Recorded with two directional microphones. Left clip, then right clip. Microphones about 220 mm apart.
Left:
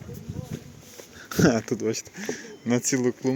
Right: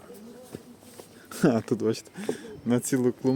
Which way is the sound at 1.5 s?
10° right (ahead or behind).